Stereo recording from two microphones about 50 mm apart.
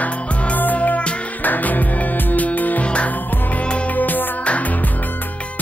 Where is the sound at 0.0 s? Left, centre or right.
Left.